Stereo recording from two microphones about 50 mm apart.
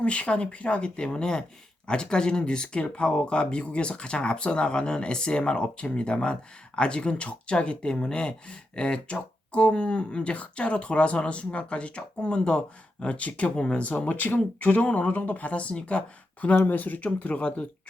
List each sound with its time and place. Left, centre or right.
0.0 s speech: left
14.1 s speech: left
16.6 s speech: left